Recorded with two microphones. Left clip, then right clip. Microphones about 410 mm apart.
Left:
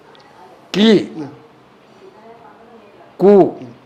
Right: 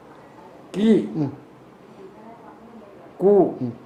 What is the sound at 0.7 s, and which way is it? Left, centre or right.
Speech, left.